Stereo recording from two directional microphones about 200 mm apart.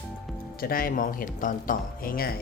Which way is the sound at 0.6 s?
45° left (ahead or behind).